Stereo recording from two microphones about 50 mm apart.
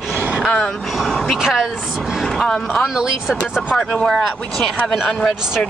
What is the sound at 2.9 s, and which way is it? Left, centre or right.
Speech, centre.